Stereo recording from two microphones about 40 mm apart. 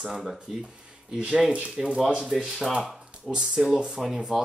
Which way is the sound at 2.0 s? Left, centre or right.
Centre.